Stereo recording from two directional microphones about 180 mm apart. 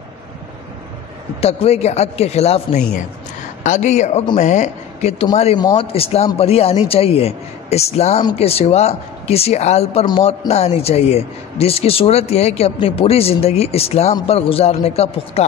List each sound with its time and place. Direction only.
1.4 s a man's voice: 35° left (ahead or behind)